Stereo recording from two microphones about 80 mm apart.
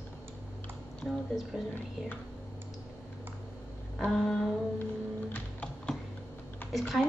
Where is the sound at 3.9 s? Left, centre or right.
Centre.